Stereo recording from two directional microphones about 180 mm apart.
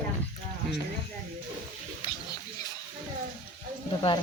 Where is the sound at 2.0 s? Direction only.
30° left (ahead or behind).